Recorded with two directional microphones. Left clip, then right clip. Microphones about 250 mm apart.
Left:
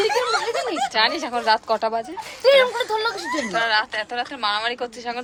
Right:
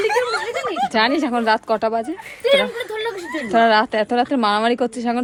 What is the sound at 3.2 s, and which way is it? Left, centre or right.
Speech, left.